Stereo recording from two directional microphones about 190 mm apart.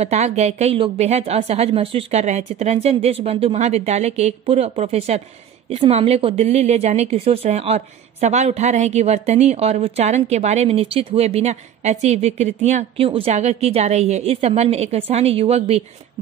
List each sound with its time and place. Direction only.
0.0 s a woman's voice: 35° right (ahead or behind)